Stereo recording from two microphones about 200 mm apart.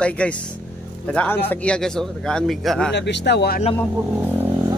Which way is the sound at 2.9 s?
60° left (ahead or behind).